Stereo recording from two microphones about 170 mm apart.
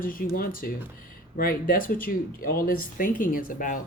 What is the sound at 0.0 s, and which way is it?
Speech, 55° left (ahead or behind).